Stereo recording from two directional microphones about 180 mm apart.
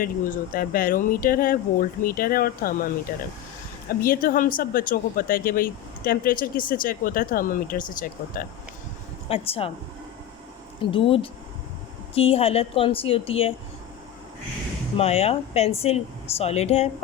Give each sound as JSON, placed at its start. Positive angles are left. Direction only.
{"t": 0.0, "sound": "speech", "side_deg": 50}
{"t": 4.0, "sound": "speech", "side_deg": 50}
{"t": 9.3, "sound": "speech", "side_deg": 30}
{"t": 10.8, "sound": "speech", "side_deg": 30}
{"t": 14.9, "sound": "speech", "side_deg": 35}